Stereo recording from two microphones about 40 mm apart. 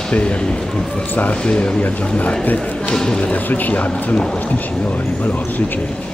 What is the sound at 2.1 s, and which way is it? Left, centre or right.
Speech, left.